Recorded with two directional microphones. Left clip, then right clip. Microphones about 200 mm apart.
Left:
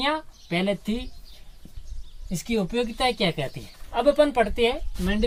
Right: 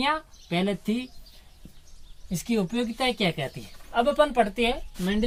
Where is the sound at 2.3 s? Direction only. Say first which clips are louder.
Left 2 dB; 20° left (ahead or behind).